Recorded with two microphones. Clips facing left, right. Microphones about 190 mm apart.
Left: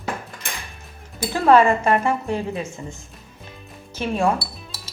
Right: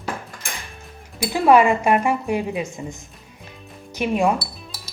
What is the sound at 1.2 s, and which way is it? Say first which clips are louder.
A woman's voice: even; 15° right (ahead or behind).